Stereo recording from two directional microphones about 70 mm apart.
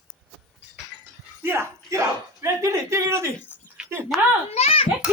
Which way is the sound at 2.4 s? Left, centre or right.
Right.